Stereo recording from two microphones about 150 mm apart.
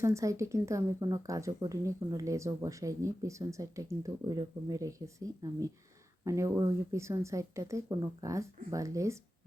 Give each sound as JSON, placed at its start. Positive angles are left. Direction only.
{"t": 0.0, "sound": "speech", "side_deg": -20}